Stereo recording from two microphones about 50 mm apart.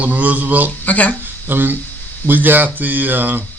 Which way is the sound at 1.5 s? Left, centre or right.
Right.